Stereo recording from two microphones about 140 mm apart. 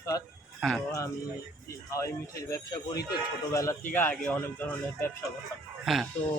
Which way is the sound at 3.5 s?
20° left (ahead or behind).